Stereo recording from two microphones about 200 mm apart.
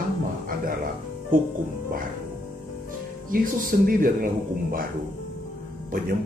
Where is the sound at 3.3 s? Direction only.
45° right (ahead or behind).